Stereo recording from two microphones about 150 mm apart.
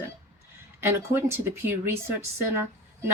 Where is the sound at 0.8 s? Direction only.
15° right (ahead or behind).